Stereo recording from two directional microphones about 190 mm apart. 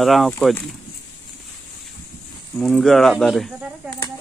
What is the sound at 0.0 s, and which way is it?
Speech, centre (ahead or behind).